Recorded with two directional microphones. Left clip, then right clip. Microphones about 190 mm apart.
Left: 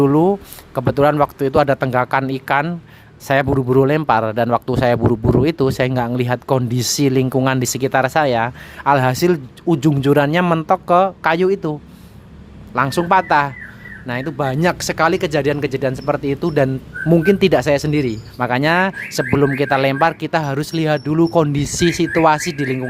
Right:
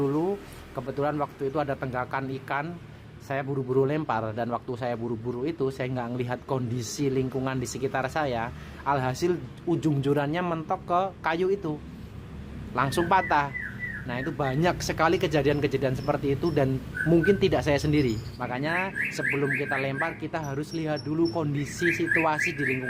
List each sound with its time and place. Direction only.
0.0 s speech: 55° left (ahead or behind); by 18.2 s 35° left (ahead or behind)
18.3 s speech: 50° left (ahead or behind)